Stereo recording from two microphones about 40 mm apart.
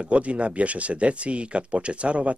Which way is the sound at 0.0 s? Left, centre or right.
Right.